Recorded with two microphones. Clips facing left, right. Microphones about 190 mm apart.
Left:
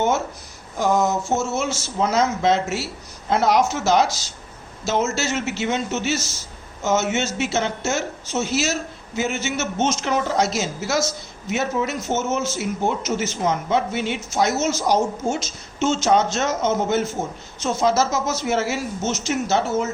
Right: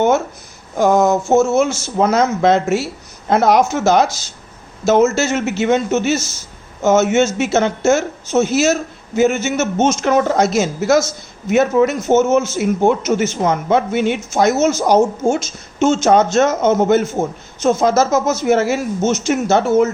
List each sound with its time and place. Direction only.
0.8 s a man's voice: 55° right (ahead or behind)